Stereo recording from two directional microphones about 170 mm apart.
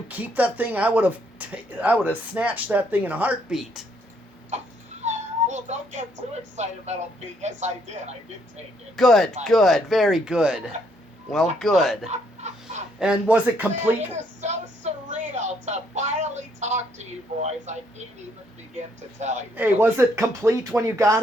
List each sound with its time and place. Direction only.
0.1 s speech: 10° right (ahead or behind)
5.0 s cat: 45° right (ahead or behind)
7.4 s speech: 40° right (ahead or behind)
9.0 s speech: centre (ahead or behind)
12.0 s chicken: 40° right (ahead or behind)
13.0 s speech: 5° right (ahead or behind)
14.4 s music: 45° right (ahead or behind)
19.2 s music: 45° right (ahead or behind)
19.5 s speech: 10° right (ahead or behind)